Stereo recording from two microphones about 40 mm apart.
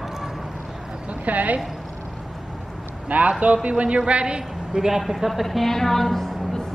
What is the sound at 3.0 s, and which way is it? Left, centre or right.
A man's voice, right.